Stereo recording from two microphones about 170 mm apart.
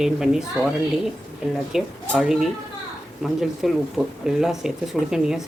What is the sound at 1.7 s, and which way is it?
Speech, centre (ahead or behind).